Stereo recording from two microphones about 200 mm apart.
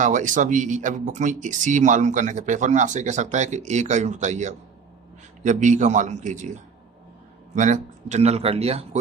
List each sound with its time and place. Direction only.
0.0 s speech: 40° right (ahead or behind)